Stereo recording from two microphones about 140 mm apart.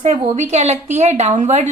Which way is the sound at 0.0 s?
55° right (ahead or behind).